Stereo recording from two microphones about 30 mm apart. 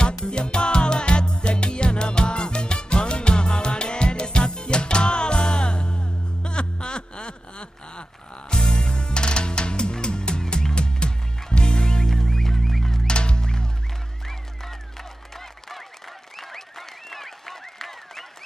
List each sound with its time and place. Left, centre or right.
0.0 s music: left; by 13.0 s centre
13.0 s music: left
16.3 s applause: centre